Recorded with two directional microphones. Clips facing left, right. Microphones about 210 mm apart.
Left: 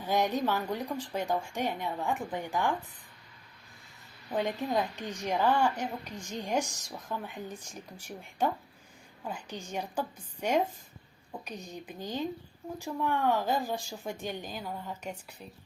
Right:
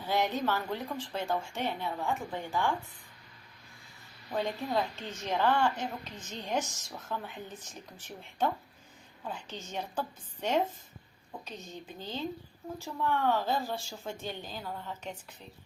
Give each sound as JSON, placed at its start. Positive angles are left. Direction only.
{"t": 0.0, "sound": "a woman's voice", "side_deg": 15}
{"t": 4.3, "sound": "a woman's voice", "side_deg": 20}